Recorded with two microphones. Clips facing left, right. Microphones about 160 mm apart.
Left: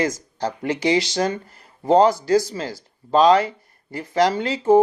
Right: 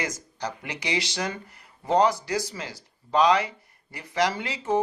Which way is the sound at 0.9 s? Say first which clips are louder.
Left 9 dB; 40° left (ahead or behind).